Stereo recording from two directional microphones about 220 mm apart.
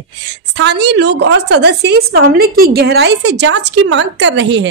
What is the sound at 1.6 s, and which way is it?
A woman's voice, 50° right (ahead or behind).